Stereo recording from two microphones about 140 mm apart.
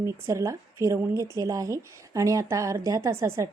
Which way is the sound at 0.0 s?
20° right (ahead or behind).